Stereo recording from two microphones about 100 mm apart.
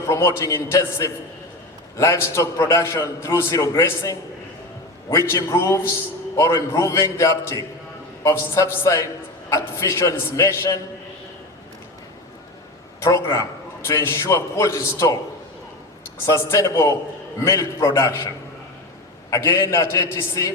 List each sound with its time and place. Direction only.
0.0 s a man's voice: 30° left (ahead or behind)
13.0 s a man's voice: 35° left (ahead or behind)
16.2 s a man's voice: 30° left (ahead or behind)
19.3 s a man's voice: 25° left (ahead or behind)